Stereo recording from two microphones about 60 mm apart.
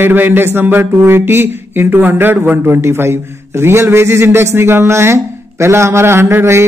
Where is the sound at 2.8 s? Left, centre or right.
Right.